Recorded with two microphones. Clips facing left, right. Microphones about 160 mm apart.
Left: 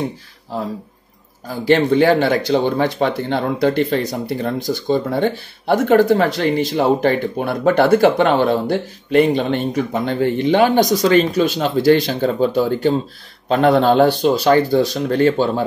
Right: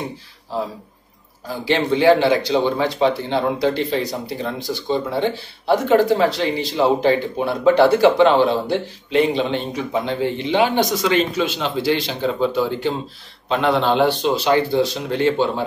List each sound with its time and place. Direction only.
1.6 s speech: 50° left (ahead or behind)